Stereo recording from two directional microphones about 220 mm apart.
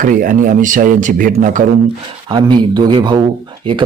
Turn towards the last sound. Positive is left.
turn(degrees=-20)  # may be behind; listen again after turning